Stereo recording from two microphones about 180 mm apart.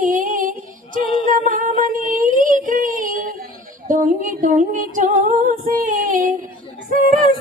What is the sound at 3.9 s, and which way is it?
Female singing, 45° right (ahead or behind).